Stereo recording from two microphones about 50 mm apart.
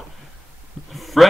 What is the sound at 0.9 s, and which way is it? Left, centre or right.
Heart sounds, centre.